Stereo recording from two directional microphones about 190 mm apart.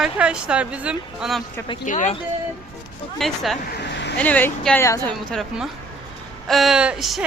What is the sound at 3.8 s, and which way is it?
Vehicle, 65° left (ahead or behind).